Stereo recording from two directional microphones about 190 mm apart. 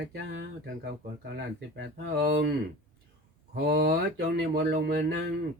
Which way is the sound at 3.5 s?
60° right (ahead or behind).